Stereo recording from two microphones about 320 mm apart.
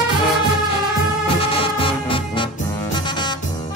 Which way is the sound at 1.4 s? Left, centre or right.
Centre.